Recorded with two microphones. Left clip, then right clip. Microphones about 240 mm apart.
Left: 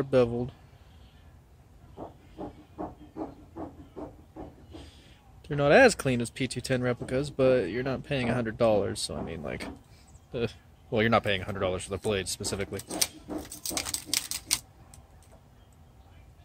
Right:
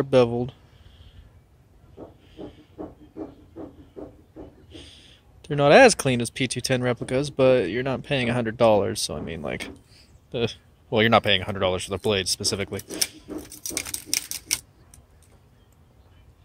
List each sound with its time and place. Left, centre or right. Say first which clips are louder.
0.0 s speech: right 5 dB; right
4.7 s speech: right 5 dB; right
14.1 s typewriter: right 3 dB; centre